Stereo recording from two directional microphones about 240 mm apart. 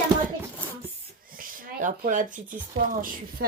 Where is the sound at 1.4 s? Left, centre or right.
Right.